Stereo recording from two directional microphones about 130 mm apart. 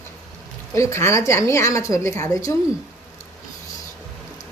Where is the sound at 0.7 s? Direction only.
20° left (ahead or behind).